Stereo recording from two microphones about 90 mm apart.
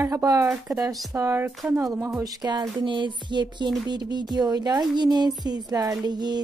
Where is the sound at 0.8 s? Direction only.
30° right (ahead or behind).